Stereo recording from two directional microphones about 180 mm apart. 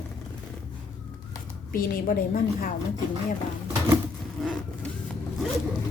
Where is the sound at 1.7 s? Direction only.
50° left (ahead or behind).